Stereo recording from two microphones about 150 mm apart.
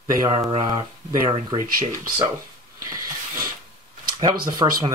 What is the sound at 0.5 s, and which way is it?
Speech, 35° right (ahead or behind).